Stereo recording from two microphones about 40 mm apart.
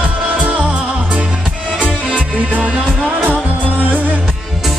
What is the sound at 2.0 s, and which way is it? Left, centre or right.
Music, right.